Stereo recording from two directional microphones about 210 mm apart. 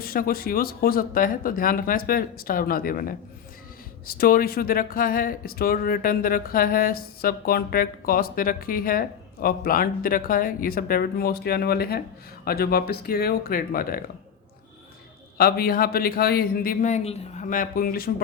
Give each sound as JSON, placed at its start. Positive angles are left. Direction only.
{"t": 0.0, "sound": "speech", "side_deg": 45}
{"t": 15.4, "sound": "speech", "side_deg": 45}